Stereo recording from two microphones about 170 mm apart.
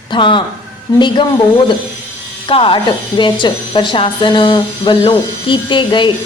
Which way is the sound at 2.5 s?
30° left (ahead or behind).